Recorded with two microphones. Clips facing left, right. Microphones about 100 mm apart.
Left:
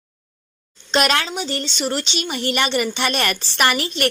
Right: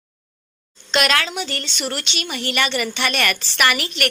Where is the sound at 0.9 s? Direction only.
35° left (ahead or behind).